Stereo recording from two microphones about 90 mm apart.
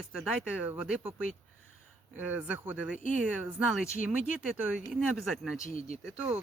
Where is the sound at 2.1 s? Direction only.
15° right (ahead or behind).